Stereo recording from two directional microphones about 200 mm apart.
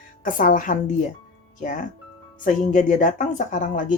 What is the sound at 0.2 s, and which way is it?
Speech, 40° left (ahead or behind).